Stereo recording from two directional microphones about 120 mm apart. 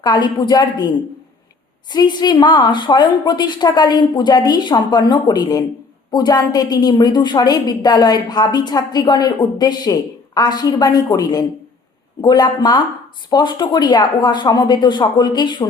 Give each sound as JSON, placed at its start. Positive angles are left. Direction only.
{"t": 0.0, "sound": "a woman's voice", "side_deg": 40}